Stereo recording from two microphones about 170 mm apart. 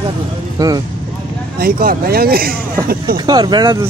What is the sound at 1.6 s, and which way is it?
Speech, 60° right (ahead or behind).